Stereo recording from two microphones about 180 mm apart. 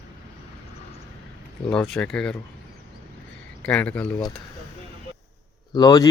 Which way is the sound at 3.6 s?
5° left (ahead or behind).